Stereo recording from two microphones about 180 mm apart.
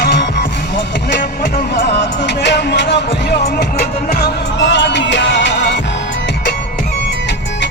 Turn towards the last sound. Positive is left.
turn(degrees=80)